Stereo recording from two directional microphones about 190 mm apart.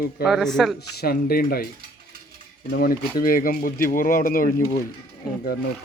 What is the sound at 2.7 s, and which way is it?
Speech, 55° left (ahead or behind).